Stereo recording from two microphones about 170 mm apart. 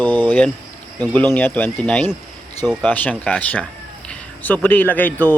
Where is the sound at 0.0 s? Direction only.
10° left (ahead or behind).